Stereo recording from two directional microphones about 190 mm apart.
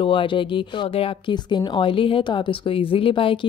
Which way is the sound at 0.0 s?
25° left (ahead or behind).